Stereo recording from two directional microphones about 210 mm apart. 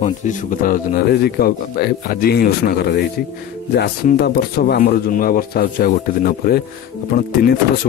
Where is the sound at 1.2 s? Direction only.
50° left (ahead or behind).